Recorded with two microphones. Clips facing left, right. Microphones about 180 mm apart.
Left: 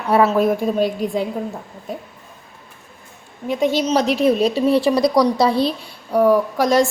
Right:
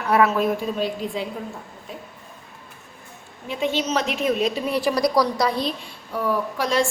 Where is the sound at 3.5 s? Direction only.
40° left (ahead or behind).